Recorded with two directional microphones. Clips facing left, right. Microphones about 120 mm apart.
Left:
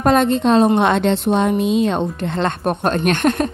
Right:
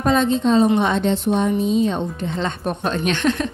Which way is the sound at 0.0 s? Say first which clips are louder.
Left 3 dB; 60° left (ahead or behind).